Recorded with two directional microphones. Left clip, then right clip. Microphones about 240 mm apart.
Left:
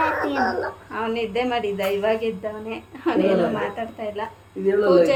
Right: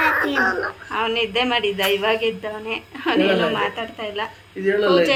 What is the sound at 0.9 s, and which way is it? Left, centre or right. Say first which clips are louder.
A woman's voice: right 4 dB; centre.